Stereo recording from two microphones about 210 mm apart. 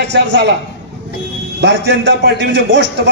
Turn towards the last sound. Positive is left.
turn(degrees=-60)  # may be behind; listen again after turning